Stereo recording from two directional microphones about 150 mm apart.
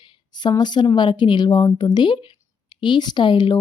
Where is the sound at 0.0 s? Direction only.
30° left (ahead or behind).